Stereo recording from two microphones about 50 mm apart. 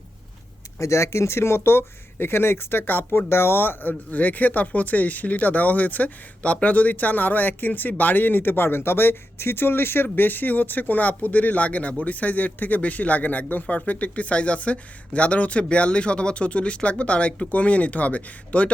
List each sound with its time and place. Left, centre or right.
0.8 s speech: left